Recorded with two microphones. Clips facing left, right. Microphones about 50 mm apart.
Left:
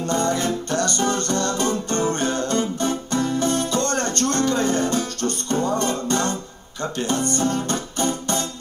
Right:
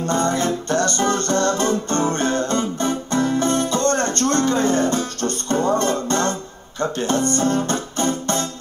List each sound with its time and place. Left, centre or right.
0.0 s music: right
6.8 s speech: right
7.6 s music: right